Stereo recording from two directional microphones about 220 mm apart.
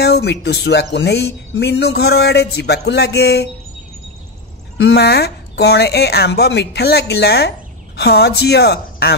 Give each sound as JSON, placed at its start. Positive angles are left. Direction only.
{"t": 0.0, "sound": "speech", "side_deg": 50}
{"t": 4.7, "sound": "speech", "side_deg": 50}